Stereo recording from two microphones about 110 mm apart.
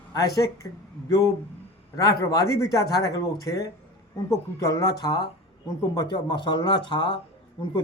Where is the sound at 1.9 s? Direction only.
30° left (ahead or behind).